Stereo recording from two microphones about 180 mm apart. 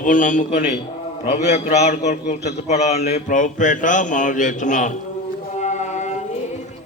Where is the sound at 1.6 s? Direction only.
40° left (ahead or behind).